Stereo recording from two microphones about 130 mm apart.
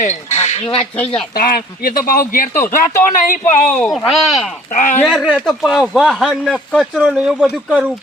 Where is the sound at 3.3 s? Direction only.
75° left (ahead or behind).